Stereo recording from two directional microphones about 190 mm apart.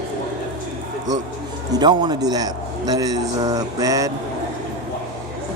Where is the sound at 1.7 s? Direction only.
25° right (ahead or behind).